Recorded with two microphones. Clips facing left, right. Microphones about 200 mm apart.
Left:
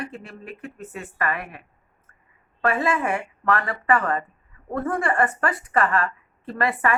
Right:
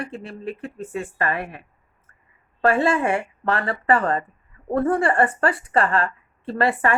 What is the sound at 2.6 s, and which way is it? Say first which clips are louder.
Speech: right 4 dB; 30° right (ahead or behind).